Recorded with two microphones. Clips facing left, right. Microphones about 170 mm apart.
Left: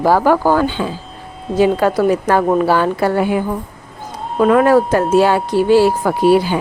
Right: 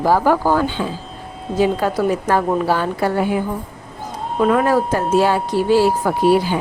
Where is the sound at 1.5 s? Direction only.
75° left (ahead or behind).